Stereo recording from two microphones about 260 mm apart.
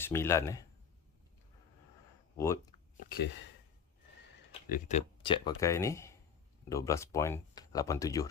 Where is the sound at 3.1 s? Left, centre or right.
Left.